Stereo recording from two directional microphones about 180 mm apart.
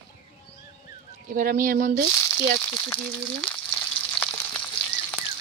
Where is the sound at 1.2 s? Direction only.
50° right (ahead or behind).